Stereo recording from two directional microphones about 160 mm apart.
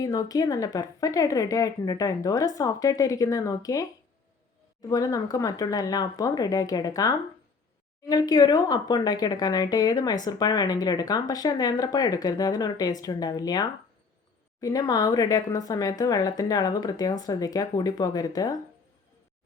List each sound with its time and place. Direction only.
0.0 s speech: 25° left (ahead or behind)
4.9 s speech: 25° left (ahead or behind)